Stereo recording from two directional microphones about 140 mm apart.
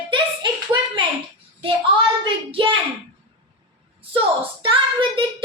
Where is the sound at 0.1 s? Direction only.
35° right (ahead or behind).